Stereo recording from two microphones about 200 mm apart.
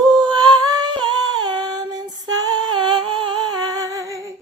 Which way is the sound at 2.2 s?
20° right (ahead or behind).